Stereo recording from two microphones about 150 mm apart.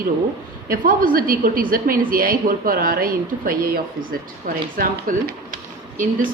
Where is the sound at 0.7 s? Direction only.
70° right (ahead or behind).